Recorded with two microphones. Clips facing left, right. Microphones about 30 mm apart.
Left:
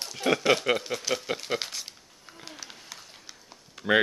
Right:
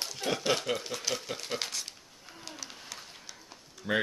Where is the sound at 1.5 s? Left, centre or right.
Centre.